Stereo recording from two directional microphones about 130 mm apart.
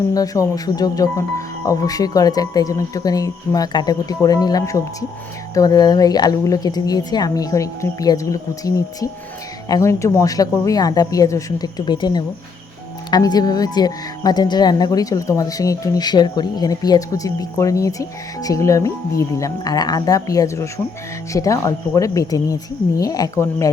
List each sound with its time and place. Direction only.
0.1 s speech: 30° left (ahead or behind)